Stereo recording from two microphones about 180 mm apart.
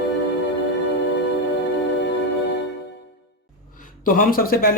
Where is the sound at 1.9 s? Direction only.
75° left (ahead or behind).